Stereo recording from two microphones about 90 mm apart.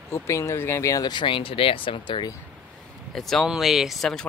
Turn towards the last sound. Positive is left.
turn(degrees=5)  # may be behind; listen again after turning